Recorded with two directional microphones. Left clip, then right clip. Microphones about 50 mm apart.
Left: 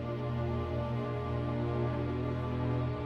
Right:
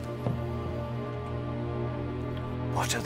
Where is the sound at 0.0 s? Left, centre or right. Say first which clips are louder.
Right 2 dB; right.